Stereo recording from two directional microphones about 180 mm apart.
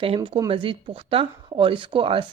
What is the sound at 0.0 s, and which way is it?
Speech, 30° right (ahead or behind).